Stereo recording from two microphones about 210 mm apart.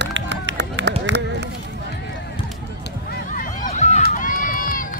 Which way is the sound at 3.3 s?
35° left (ahead or behind).